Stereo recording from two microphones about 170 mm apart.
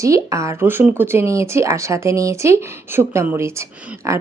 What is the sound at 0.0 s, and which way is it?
Speech, 20° right (ahead or behind).